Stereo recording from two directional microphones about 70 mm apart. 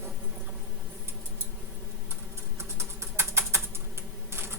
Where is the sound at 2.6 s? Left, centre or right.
Right.